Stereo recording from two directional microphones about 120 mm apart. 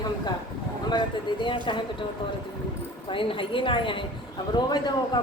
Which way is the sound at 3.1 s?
45° left (ahead or behind).